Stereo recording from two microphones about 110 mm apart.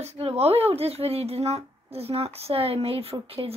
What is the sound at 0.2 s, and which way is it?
Speech, 65° right (ahead or behind).